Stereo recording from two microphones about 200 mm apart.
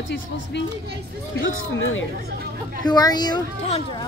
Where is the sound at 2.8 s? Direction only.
20° left (ahead or behind).